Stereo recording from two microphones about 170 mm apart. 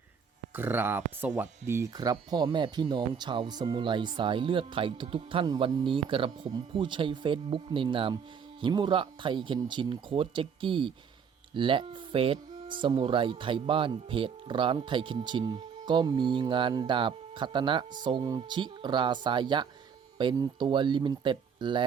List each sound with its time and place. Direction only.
0.5 s speech: 10° right (ahead or behind); by 21.8 s 30° right (ahead or behind)